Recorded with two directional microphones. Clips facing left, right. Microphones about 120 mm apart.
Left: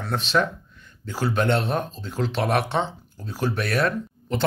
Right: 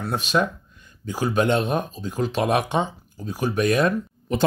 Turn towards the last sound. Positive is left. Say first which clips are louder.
# right 3 dB
turn(degrees=-15)  # may be behind; listen again after turning